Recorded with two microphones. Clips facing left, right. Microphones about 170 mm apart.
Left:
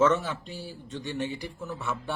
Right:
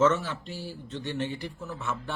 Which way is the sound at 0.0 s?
15° left (ahead or behind).